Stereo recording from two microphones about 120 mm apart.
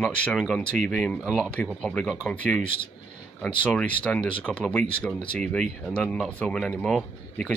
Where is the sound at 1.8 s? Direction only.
5° left (ahead or behind).